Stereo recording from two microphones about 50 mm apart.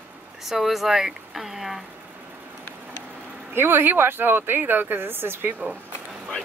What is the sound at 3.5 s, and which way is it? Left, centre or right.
Speech, right.